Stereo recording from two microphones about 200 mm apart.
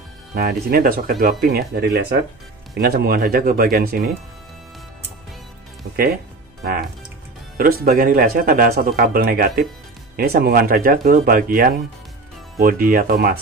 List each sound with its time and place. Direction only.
0.3 s speech: 50° right (ahead or behind)
6.6 s speech: 50° right (ahead or behind)